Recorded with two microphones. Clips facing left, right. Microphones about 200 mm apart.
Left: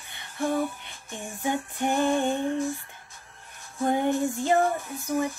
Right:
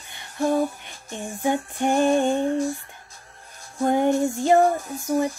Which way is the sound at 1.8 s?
15° right (ahead or behind).